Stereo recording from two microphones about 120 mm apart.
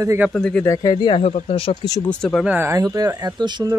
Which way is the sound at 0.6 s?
30° left (ahead or behind).